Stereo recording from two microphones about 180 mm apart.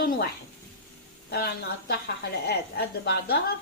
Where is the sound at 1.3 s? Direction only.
60° left (ahead or behind).